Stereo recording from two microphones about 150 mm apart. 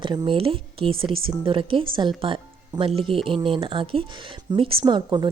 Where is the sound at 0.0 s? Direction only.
35° right (ahead or behind).